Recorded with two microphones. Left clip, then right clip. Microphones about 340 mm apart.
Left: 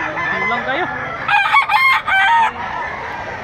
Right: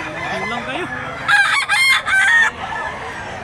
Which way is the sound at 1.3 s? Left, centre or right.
Centre.